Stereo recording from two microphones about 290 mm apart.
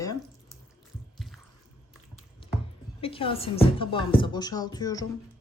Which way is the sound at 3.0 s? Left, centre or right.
Centre.